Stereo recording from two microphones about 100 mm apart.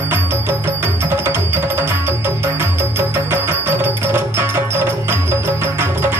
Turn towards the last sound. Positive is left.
turn(degrees=-25)  # may be behind; listen again after turning